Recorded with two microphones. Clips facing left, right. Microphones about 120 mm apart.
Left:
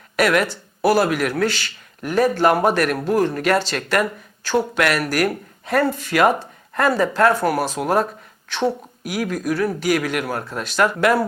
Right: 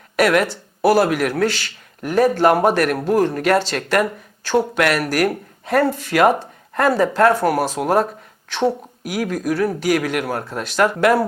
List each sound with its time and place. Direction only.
0.2 s speech: 50° right (ahead or behind)
3.8 s speech: 40° right (ahead or behind)
4.8 s speech: 50° right (ahead or behind)
9.0 s speech: 50° right (ahead or behind)